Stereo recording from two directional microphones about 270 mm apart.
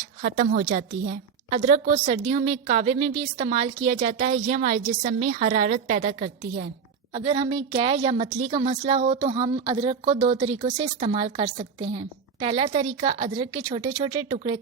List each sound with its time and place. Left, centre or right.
0.2 s a woman's voice: right